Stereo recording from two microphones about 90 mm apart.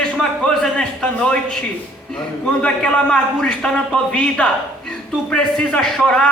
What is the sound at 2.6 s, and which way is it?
A man's voice, 10° left (ahead or behind).